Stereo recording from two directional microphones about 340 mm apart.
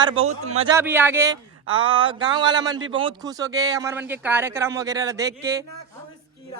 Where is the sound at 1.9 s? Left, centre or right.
Centre.